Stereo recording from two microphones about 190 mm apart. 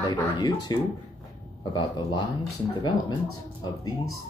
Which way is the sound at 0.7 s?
20° left (ahead or behind).